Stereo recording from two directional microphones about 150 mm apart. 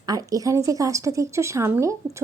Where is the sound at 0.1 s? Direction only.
25° right (ahead or behind).